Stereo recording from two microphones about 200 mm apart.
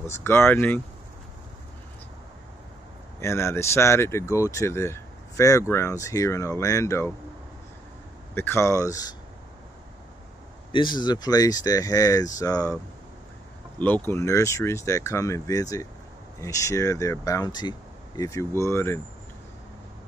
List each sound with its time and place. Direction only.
0.2 s speech: 10° left (ahead or behind)
3.2 s speech: 15° left (ahead or behind)
8.4 s speech: 10° left (ahead or behind)
10.7 s speech: 25° left (ahead or behind)
13.7 s speech: 10° left (ahead or behind)